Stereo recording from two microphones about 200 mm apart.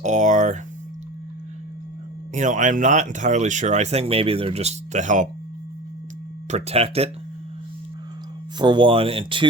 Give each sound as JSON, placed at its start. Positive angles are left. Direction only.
{"t": 0.0, "sound": "speech", "side_deg": -35}
{"t": 2.3, "sound": "speech", "side_deg": -40}
{"t": 6.5, "sound": "speech", "side_deg": -30}
{"t": 8.5, "sound": "speech", "side_deg": -20}